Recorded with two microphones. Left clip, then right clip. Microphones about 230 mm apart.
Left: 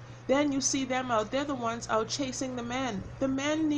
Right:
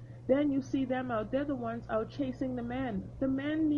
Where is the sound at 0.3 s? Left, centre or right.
Centre.